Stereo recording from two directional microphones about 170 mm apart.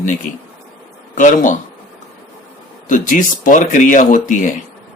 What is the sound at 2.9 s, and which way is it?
Speech, 50° left (ahead or behind).